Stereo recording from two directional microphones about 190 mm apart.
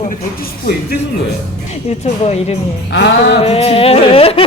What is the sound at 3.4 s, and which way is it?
Music, 30° left (ahead or behind).